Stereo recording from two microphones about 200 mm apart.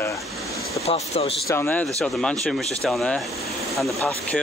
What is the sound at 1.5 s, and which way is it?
Speech, 10° left (ahead or behind).